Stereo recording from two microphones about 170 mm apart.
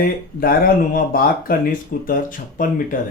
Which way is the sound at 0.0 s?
60° left (ahead or behind).